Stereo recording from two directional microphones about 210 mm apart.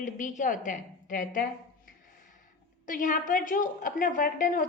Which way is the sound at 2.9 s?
40° left (ahead or behind).